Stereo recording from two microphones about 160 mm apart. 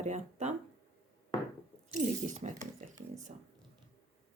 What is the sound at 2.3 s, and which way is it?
Speech, 50° right (ahead or behind).